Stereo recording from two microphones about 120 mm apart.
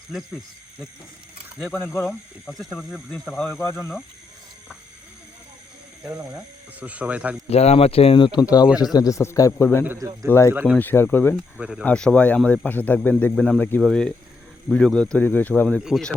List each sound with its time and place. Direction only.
1.5 s speech: 5° right (ahead or behind)
6.1 s speech: 10° right (ahead or behind)
7.5 s speech: 60° left (ahead or behind); by 9.8 s 20° left (ahead or behind)
10.0 s speech: 25° right (ahead or behind)
10.5 s speech: 15° right (ahead or behind)
10.8 s speech: 15° left (ahead or behind)
11.3 s speech: 5° right (ahead or behind)
11.9 s speech: 10° left (ahead or behind)
15.8 s speech: 5° right (ahead or behind)